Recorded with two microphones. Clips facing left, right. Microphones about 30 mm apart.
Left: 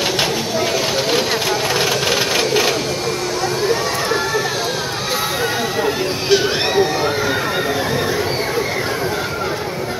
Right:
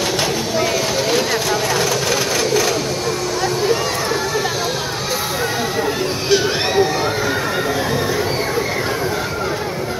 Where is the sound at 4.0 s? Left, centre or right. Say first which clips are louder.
Left 1 dB; centre.